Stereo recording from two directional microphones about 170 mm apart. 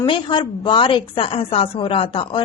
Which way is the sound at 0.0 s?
30° left (ahead or behind).